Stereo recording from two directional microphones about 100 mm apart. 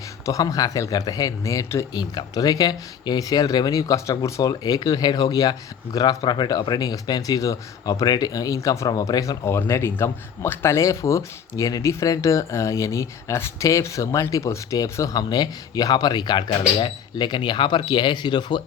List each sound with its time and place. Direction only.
0.3 s speech: 35° left (ahead or behind)
1.9 s speech: 45° left (ahead or behind)